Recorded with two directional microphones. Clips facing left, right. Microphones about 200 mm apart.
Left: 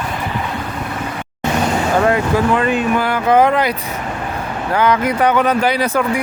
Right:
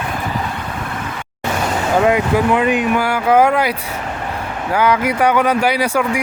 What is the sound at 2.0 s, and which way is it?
Speech, 10° right (ahead or behind).